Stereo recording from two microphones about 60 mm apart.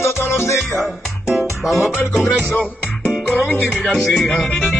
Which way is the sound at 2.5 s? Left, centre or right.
Left.